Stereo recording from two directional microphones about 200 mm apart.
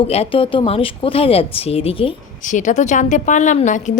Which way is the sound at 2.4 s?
40° left (ahead or behind).